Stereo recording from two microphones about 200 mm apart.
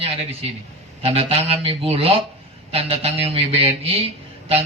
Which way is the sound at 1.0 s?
30° right (ahead or behind).